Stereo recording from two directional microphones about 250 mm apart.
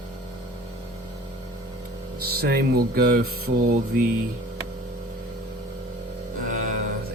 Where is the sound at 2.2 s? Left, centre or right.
Right.